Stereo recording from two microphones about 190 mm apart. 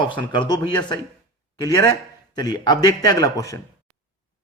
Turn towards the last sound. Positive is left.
turn(degrees=20)  # may be behind; listen again after turning